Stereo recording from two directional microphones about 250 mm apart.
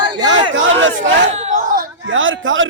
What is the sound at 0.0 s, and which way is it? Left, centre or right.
Crowd, centre.